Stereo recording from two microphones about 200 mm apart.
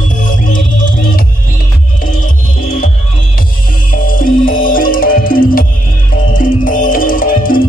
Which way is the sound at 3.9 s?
45° left (ahead or behind).